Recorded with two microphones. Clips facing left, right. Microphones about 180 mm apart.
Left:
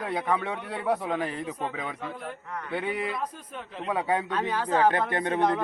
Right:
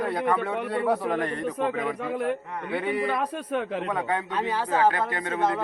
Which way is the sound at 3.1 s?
75° right (ahead or behind).